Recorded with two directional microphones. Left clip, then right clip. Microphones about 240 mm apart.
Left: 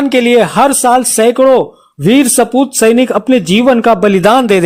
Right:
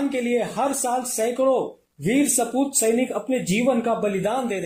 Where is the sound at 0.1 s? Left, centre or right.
Left.